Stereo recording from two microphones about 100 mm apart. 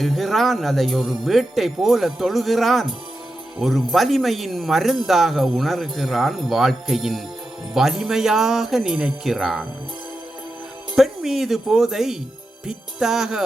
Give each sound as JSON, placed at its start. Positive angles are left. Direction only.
{"t": 0.0, "sound": "speech", "side_deg": 0}
{"t": 10.9, "sound": "speech", "side_deg": 0}